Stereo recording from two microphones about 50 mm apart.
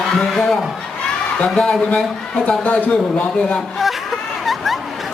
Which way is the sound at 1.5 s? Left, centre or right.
Centre.